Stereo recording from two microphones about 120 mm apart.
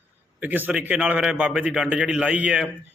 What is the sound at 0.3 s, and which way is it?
A man's voice, 15° right (ahead or behind).